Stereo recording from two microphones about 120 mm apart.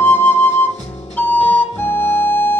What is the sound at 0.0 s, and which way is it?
Flute, 15° left (ahead or behind).